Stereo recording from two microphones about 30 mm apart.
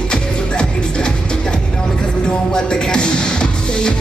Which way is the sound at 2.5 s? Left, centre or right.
Left.